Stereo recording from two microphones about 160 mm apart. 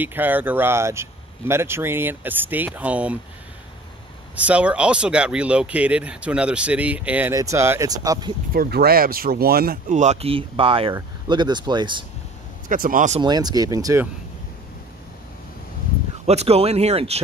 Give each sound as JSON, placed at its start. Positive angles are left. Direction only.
{"t": 0.0, "sound": "speech", "side_deg": -10}
{"t": 4.4, "sound": "speech", "side_deg": -10}
{"t": 8.5, "sound": "speech", "side_deg": -80}
{"t": 9.8, "sound": "speech", "side_deg": -50}
{"t": 12.6, "sound": "speech", "side_deg": -60}
{"t": 13.2, "sound": "speech", "side_deg": -25}
{"t": 16.3, "sound": "speech", "side_deg": -40}